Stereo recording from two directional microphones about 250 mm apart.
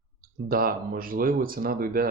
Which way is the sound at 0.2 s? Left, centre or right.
Right.